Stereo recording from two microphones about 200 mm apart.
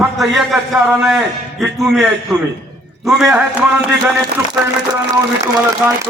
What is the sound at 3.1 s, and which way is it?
Speech, centre (ahead or behind).